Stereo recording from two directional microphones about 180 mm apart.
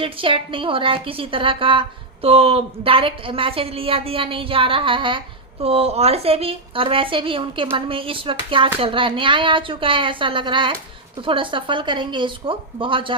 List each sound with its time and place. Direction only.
0.0 s a woman's voice: 30° right (ahead or behind)